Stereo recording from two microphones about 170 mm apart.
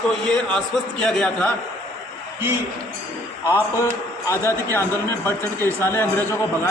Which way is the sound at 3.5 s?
15° left (ahead or behind).